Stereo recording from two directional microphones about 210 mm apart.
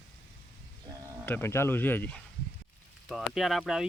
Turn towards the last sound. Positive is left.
turn(degrees=0)  # may be behind; listen again after turning